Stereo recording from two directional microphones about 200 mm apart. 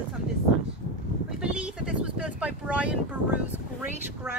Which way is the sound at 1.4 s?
5° right (ahead or behind).